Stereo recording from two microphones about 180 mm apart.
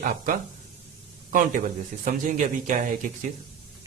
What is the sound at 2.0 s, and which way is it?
A man's voice, 45° right (ahead or behind).